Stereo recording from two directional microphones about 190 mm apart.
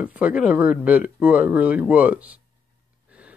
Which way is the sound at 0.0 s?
5° right (ahead or behind).